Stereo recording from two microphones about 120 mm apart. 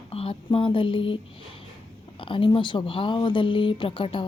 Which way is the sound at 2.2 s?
45° left (ahead or behind).